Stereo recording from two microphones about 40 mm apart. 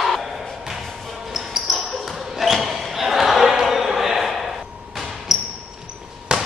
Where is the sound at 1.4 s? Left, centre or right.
Centre.